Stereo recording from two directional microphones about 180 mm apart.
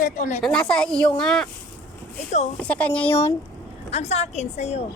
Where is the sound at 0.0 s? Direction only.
45° left (ahead or behind).